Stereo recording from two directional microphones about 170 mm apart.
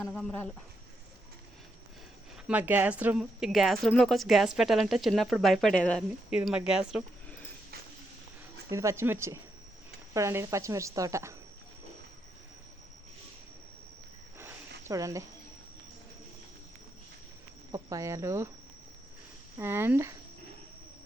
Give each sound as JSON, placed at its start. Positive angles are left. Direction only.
{"t": 0.1, "sound": "speech", "side_deg": 10}
{"t": 2.5, "sound": "a woman's voice", "side_deg": -10}
{"t": 6.3, "sound": "a woman's voice", "side_deg": -5}
{"t": 8.7, "sound": "speech", "side_deg": -15}
{"t": 14.8, "sound": "speech", "side_deg": -20}
{"t": 17.7, "sound": "speech", "side_deg": -20}
{"t": 19.5, "sound": "speech", "side_deg": -15}